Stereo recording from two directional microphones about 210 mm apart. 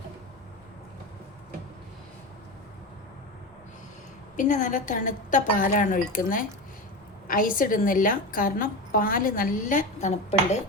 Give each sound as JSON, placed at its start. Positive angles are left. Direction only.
{"t": 4.4, "sound": "a woman's voice", "side_deg": 35}